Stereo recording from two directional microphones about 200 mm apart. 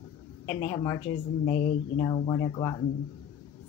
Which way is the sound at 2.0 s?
20° left (ahead or behind).